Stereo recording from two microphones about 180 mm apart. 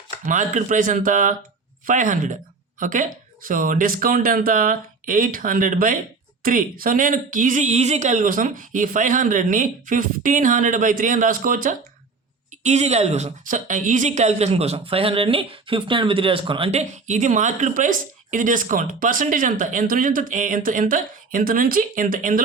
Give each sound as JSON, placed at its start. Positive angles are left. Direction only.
{"t": 0.3, "sound": "a woman's voice", "side_deg": -45}
{"t": 12.6, "sound": "a woman's voice", "side_deg": -40}